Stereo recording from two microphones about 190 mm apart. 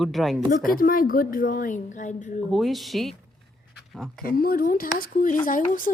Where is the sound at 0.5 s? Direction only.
45° left (ahead or behind).